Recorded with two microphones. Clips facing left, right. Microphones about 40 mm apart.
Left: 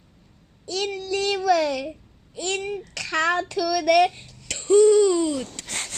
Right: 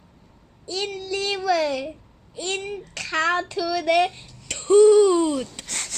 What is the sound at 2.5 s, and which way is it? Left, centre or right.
A child's voice, right.